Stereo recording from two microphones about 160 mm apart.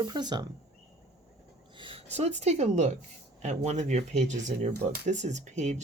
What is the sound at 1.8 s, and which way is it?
Speech, 35° right (ahead or behind).